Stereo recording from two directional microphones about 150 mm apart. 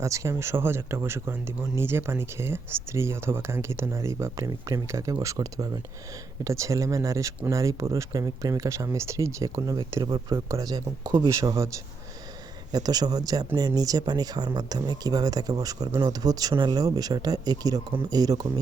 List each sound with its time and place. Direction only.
0.0 s speech: 20° right (ahead or behind)
12.7 s speech: 25° right (ahead or behind)